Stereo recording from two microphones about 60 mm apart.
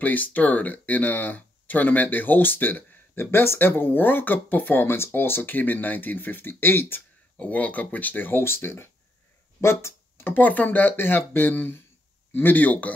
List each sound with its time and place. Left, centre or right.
0.0 s speech: left
7.3 s speech: left